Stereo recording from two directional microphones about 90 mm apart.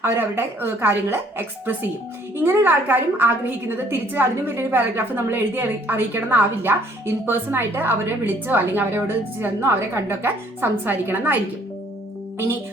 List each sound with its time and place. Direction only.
0.0 s a woman's voice: 25° right (ahead or behind)